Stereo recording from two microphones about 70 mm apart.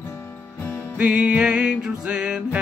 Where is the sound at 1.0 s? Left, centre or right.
Centre.